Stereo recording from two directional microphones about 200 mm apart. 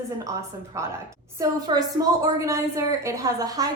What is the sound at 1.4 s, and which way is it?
A woman's voice, 20° right (ahead or behind).